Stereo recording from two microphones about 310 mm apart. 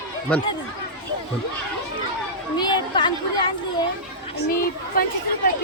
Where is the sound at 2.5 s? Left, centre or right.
Centre.